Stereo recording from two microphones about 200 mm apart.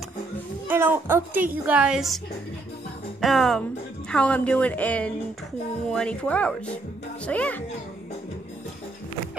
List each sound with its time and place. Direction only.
0.7 s a woman's voice: 10° right (ahead or behind)
3.2 s a woman's voice: centre (ahead or behind)